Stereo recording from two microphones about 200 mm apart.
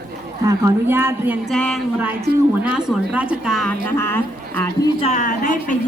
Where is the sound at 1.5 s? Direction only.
Centre (ahead or behind).